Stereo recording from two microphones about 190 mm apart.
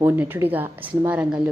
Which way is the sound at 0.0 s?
10° right (ahead or behind).